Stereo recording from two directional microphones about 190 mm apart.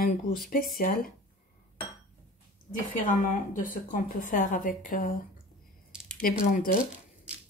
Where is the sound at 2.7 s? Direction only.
45° left (ahead or behind).